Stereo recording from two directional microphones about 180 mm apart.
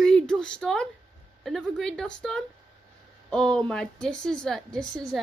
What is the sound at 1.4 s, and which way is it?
A woman's voice, centre (ahead or behind).